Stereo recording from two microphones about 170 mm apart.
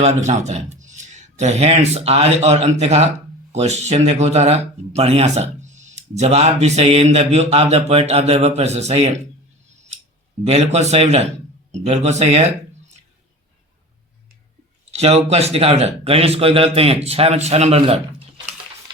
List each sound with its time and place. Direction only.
0.0 s speech: 40° right (ahead or behind)
10.4 s speech: 40° right (ahead or behind)
14.9 s speech: 40° right (ahead or behind)